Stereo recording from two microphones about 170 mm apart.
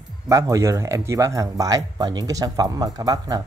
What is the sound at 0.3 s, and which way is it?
Speech, 20° right (ahead or behind).